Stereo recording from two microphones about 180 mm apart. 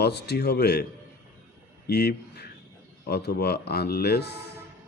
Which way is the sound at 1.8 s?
65° left (ahead or behind).